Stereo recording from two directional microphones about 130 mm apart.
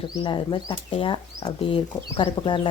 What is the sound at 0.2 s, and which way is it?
Speech, 40° left (ahead or behind).